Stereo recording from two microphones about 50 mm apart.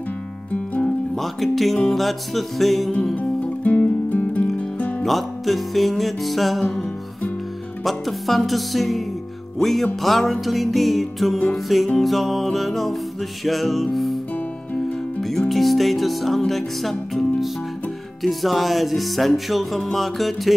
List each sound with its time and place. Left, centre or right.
1.1 s music: centre
3.2 s music: left
5.0 s music: centre
15.2 s music: centre